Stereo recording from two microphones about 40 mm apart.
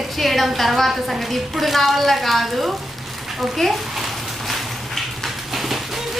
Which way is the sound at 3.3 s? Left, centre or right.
Centre.